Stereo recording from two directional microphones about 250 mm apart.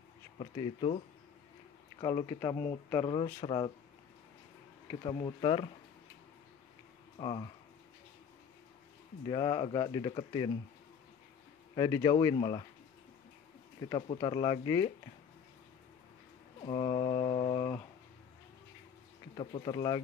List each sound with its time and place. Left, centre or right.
0.4 s speech: left
5.0 s speech: centre
7.2 s speech: left
9.3 s speech: centre
11.7 s speech: centre
13.8 s speech: centre
16.6 s mantra: left
19.3 s speech: centre